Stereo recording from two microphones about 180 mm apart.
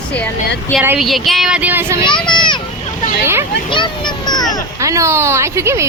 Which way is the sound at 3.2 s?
15° right (ahead or behind).